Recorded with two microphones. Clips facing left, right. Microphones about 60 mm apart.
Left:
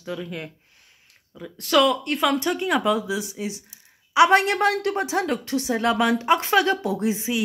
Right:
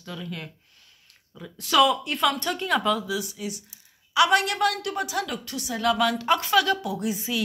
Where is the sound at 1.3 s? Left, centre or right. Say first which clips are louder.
Left 1 dB; centre.